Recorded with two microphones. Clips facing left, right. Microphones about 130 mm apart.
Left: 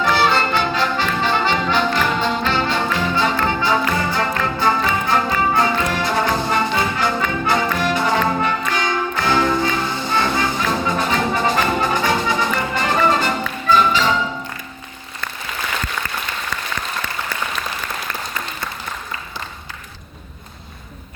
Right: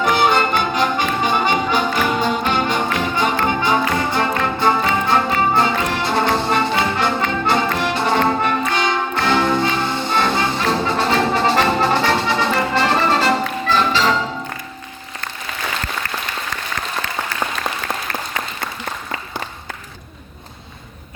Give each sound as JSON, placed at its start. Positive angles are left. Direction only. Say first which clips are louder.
{"t": 0.0, "sound": "music", "louder": "right 1 dB", "side_deg": -15}
{"t": 0.9, "sound": "brass instrument", "louder": "right 1 dB", "side_deg": -15}
{"t": 8.7, "sound": "music", "louder": "right 2 dB", "side_deg": -25}